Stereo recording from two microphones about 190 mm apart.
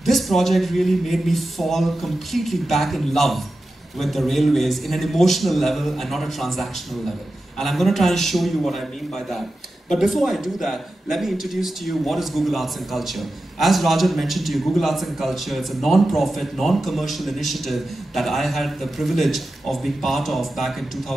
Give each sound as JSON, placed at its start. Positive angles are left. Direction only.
{"t": 0.0, "sound": "a man's voice", "side_deg": 0}